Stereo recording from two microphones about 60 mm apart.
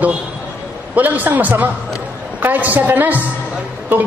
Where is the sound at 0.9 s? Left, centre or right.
Right.